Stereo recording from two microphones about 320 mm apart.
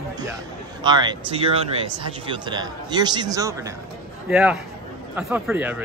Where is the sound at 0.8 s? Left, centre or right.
Centre.